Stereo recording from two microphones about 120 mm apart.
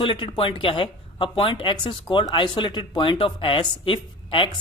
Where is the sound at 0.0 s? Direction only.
45° left (ahead or behind).